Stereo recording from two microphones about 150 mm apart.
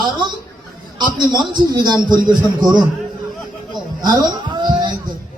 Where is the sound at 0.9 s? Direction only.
30° right (ahead or behind).